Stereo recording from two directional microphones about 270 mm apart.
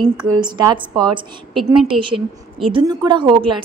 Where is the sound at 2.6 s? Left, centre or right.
Centre.